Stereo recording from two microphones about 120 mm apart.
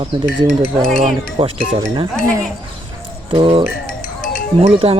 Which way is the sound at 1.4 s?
50° right (ahead or behind).